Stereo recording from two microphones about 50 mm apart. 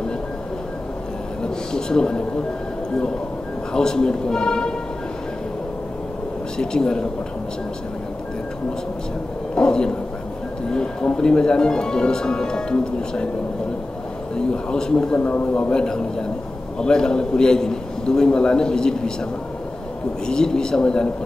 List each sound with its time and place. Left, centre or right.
1.7 s speech: centre
3.7 s speech: centre
6.6 s speech: centre
9.6 s speech: centre
14.5 s speech: centre
15.1 s speech: left
15.7 s speech: centre
20.2 s speech: centre